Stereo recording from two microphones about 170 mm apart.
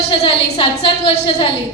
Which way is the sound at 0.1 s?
35° left (ahead or behind).